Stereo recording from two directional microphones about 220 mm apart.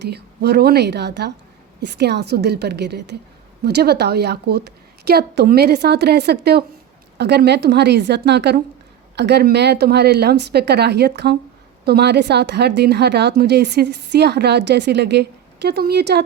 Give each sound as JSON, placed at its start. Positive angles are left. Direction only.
{"t": 0.1, "sound": "a woman's voice", "side_deg": -45}